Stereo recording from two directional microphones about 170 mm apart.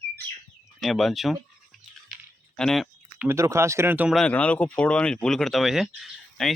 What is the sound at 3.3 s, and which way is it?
Speech, 15° right (ahead or behind).